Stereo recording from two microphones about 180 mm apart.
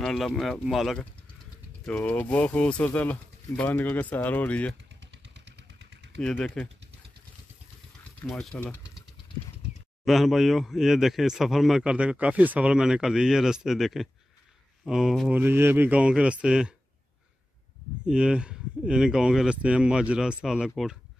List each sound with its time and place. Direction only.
0.0 s a man's voice: 5° left (ahead or behind)
5.0 s vehicle: 75° right (ahead or behind)
6.1 s a man's voice: 5° left (ahead or behind)
8.3 s a man's voice: centre (ahead or behind)
10.0 s a man's voice: centre (ahead or behind)
18.0 s a man's voice: 5° right (ahead or behind)